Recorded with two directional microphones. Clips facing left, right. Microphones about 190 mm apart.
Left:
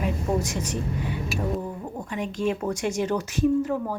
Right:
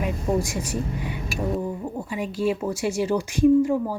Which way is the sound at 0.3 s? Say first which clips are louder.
Right 2 dB; 10° right (ahead or behind).